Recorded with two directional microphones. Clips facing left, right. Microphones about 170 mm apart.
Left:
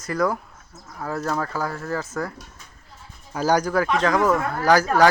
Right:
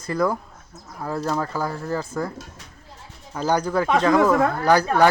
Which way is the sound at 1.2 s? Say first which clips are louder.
Right 1 dB; 25° right (ahead or behind).